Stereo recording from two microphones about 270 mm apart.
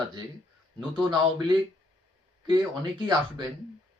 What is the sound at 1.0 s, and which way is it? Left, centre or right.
Speech, centre.